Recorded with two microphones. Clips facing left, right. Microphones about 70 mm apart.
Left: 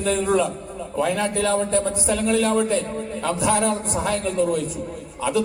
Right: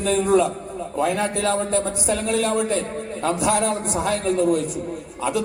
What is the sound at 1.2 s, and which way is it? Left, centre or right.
A man's voice, right.